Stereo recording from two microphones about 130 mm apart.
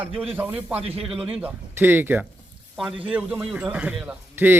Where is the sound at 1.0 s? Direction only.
5° right (ahead or behind).